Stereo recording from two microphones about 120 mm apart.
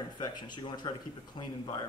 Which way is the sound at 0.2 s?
35° left (ahead or behind).